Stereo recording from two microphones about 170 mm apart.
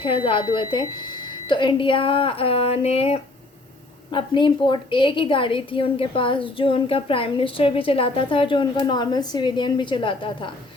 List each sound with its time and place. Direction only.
0.0 s a woman's voice: 30° left (ahead or behind)